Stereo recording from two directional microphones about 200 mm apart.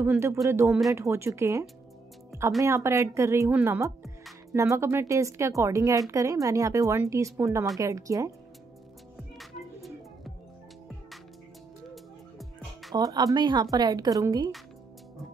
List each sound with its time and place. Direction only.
0.0 s a woman's voice: 15° right (ahead or behind)
9.4 s music: centre (ahead or behind)
11.9 s music: centre (ahead or behind)
12.9 s speech: 20° right (ahead or behind)